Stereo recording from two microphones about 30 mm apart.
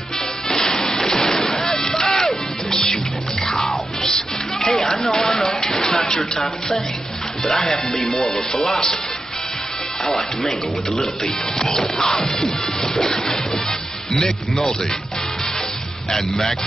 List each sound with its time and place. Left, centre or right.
0.5 s music: centre
4.9 s a sound: centre
5.3 s music: centre
7.6 s speech: centre
8.6 s speech: centre
11.0 s speech: centre
16.1 s speech: centre